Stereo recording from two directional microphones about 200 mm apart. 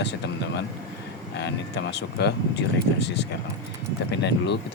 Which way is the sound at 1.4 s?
60° left (ahead or behind).